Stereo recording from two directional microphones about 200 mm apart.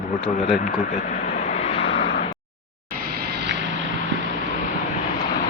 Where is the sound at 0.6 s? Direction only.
45° left (ahead or behind).